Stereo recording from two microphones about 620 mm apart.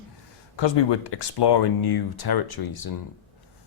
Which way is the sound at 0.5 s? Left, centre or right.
Left.